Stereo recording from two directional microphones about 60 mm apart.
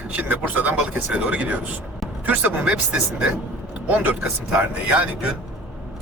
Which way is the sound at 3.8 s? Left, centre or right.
Right.